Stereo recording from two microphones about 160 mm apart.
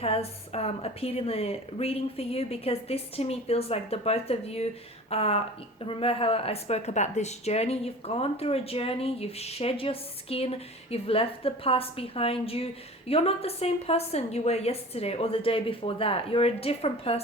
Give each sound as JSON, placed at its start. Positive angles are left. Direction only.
{"t": 0.0, "sound": "speech", "side_deg": 40}